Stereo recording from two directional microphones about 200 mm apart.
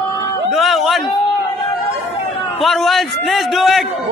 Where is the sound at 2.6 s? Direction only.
Centre (ahead or behind).